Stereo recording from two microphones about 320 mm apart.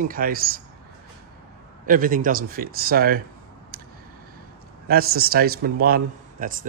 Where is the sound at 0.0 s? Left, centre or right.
Right.